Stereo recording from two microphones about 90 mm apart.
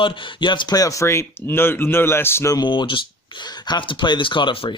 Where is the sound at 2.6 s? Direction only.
65° left (ahead or behind).